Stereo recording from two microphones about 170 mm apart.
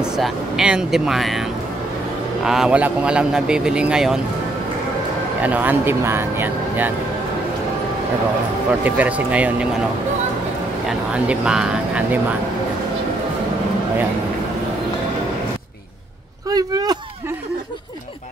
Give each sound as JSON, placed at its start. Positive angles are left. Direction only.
{"t": 0.0, "sound": "a man's voice", "side_deg": -5}
{"t": 5.4, "sound": "speech", "side_deg": -10}
{"t": 8.8, "sound": "speech", "side_deg": -10}
{"t": 10.9, "sound": "a man's voice", "side_deg": -5}
{"t": 16.4, "sound": "a sound", "side_deg": -20}